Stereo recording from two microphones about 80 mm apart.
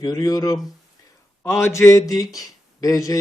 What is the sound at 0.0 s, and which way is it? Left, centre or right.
Speech, left.